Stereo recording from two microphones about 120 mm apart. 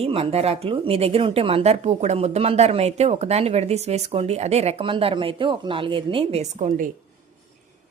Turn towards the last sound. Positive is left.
turn(degrees=-75)  # may be behind; listen again after turning